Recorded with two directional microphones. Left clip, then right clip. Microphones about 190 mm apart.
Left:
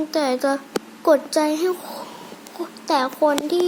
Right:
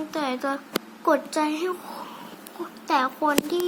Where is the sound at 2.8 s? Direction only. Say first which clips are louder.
Left 4 dB; 10° left (ahead or behind).